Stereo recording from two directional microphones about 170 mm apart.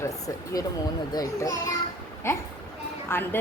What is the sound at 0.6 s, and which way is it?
A child's voice, 20° left (ahead or behind).